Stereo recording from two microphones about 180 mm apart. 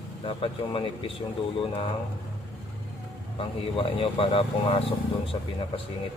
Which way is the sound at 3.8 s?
30° left (ahead or behind).